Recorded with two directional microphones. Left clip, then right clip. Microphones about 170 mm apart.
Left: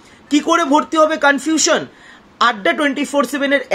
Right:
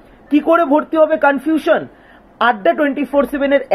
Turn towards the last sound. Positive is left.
turn(degrees=20)  # may be behind; listen again after turning